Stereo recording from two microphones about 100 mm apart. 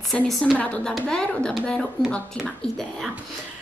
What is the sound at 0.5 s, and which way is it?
A woman's voice, 10° left (ahead or behind).